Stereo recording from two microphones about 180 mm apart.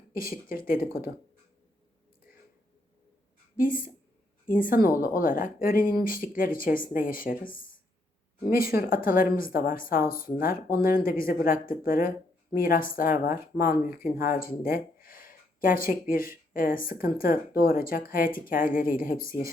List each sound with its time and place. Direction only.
0.1 s speech: 55° left (ahead or behind)
3.6 s speech: 50° left (ahead or behind)